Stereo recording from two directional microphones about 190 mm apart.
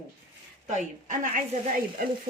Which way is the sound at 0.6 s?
40° right (ahead or behind).